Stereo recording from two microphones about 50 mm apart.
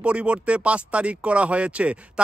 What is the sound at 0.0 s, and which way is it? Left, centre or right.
Speech, right.